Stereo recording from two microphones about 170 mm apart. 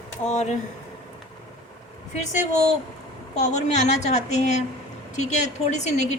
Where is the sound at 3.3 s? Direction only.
45° left (ahead or behind).